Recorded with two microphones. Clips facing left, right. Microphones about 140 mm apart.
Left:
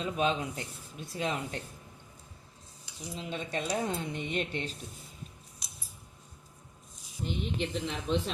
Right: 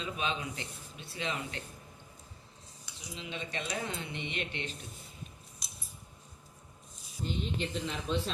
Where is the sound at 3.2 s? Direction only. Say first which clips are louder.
Left 4 dB; 45° left (ahead or behind).